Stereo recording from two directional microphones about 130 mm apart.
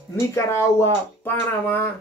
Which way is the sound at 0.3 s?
20° left (ahead or behind).